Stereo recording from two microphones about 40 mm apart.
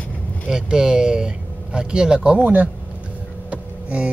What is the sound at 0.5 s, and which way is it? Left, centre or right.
Speech, centre.